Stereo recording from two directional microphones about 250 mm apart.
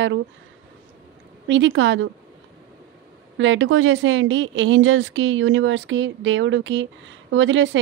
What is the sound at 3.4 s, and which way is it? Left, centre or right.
Speech, right.